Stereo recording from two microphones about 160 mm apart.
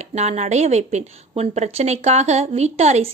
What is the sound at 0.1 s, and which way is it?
A woman's voice, 45° right (ahead or behind).